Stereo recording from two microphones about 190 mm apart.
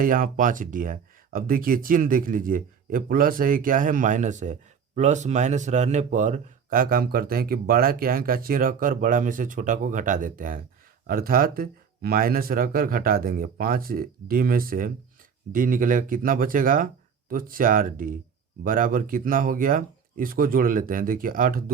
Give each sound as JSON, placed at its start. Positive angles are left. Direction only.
{"t": 0.0, "sound": "speech", "side_deg": -45}